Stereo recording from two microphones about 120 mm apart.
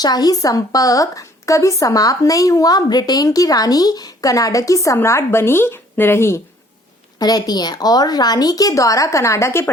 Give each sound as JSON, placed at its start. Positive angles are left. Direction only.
{"t": 0.0, "sound": "a woman's voice", "side_deg": 35}
{"t": 7.2, "sound": "a woman's voice", "side_deg": 35}